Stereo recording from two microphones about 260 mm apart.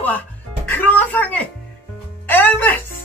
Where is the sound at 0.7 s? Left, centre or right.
Centre.